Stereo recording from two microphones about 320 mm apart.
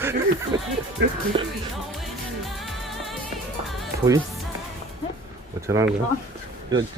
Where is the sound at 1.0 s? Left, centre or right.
Right.